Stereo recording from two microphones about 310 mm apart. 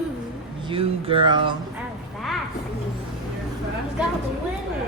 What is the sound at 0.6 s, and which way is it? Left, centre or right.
Speech, centre.